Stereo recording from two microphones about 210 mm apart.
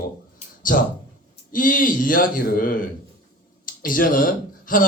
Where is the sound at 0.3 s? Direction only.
40° left (ahead or behind).